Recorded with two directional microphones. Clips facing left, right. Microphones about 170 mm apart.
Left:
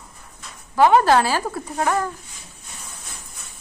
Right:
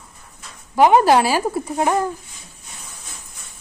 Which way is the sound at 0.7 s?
15° right (ahead or behind).